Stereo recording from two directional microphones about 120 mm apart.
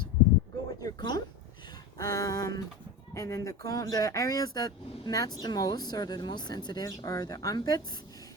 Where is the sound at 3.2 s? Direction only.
25° left (ahead or behind).